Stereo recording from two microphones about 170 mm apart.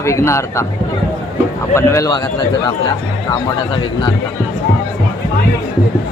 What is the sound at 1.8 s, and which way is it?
Speech, 15° left (ahead or behind).